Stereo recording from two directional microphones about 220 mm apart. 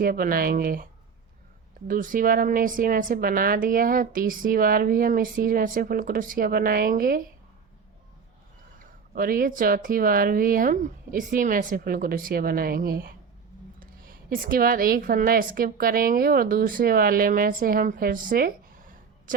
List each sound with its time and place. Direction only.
0.0 s a woman's voice: 40° right (ahead or behind)
1.9 s a woman's voice: 40° right (ahead or behind)
9.1 s a woman's voice: 40° right (ahead or behind)